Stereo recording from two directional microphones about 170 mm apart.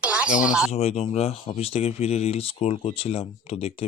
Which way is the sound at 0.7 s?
40° left (ahead or behind).